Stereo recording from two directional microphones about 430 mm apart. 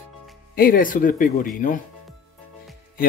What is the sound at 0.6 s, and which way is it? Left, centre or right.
Speech, centre.